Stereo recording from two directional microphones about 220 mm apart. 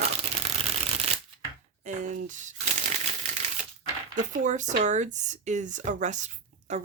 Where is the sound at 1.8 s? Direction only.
35° right (ahead or behind).